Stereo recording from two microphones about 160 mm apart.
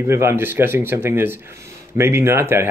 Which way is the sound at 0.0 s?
15° right (ahead or behind).